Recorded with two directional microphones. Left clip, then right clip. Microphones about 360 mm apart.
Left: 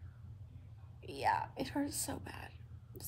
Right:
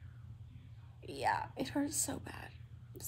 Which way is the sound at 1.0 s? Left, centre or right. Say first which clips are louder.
Left 1 dB; centre.